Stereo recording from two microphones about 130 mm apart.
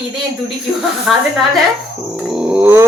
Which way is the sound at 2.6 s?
15° right (ahead or behind).